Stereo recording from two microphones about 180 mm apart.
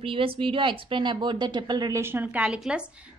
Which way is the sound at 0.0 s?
30° right (ahead or behind).